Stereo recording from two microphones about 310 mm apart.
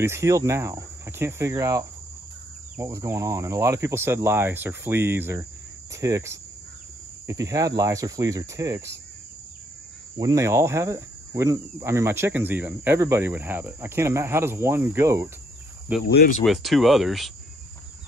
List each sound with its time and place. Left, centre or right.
0.0 s speech: centre
10.1 s speech: centre
16.2 s speech: left
16.4 s speech: centre